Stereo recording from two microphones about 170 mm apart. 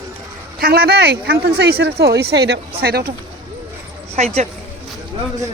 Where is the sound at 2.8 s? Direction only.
65° right (ahead or behind).